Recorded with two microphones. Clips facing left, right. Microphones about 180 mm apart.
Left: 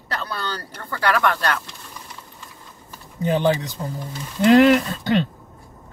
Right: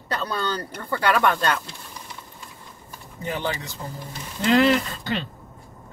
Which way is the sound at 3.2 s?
20° left (ahead or behind).